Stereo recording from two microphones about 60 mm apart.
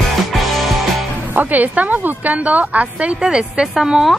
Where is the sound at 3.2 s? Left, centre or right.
Centre.